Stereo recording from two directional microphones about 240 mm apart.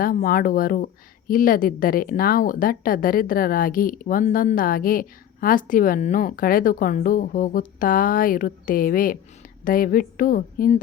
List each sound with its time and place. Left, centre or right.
0.0 s speech: left